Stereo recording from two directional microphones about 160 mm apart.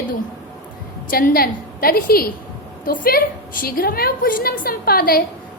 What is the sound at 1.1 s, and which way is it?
A woman's voice, 70° left (ahead or behind).